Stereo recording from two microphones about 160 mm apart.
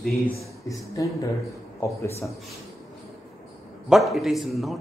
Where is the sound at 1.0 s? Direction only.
25° left (ahead or behind).